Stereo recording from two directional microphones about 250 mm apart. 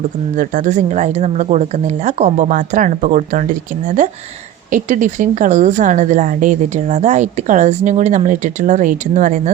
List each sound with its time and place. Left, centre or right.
0.3 s speech: right